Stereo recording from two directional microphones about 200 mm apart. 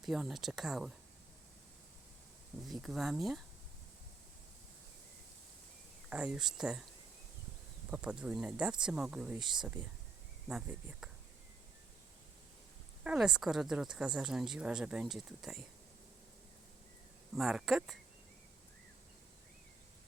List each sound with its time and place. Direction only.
0.0 s speech: centre (ahead or behind)
2.6 s speech: centre (ahead or behind)
6.1 s speech: 5° right (ahead or behind)
7.9 s speech: 5° right (ahead or behind)
9.4 s speech: 20° right (ahead or behind)
9.6 s speech: 5° right (ahead or behind)
13.1 s speech: 5° right (ahead or behind)
17.3 s speech: centre (ahead or behind)